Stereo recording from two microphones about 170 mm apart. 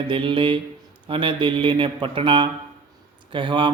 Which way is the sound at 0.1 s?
30° right (ahead or behind).